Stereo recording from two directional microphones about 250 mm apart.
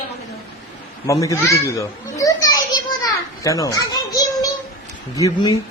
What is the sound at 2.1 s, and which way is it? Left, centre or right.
Children playing, centre.